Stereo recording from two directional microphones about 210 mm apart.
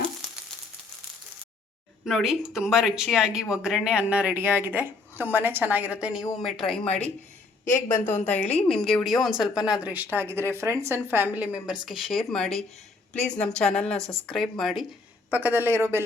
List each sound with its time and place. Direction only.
2.0 s speech: centre (ahead or behind)
7.7 s a woman's voice: 35° left (ahead or behind)
8.6 s speech: centre (ahead or behind)